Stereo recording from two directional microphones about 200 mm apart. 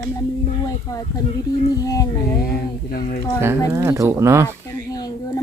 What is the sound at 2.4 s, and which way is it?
Speech, 50° left (ahead or behind).